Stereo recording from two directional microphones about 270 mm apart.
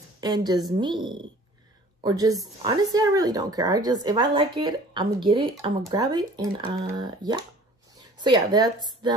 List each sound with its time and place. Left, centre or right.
0.2 s speech: centre